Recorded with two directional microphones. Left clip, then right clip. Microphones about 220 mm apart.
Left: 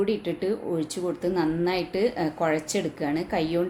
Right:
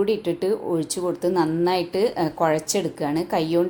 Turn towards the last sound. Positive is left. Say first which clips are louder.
# right 4 dB
turn(degrees=-5)  # may be behind; listen again after turning